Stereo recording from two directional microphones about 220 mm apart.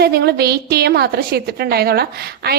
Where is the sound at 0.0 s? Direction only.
45° right (ahead or behind).